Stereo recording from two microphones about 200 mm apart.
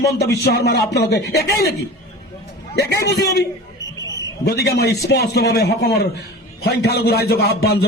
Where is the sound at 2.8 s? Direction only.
55° left (ahead or behind).